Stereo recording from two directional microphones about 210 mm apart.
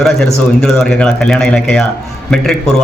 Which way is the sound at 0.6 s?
Centre (ahead or behind).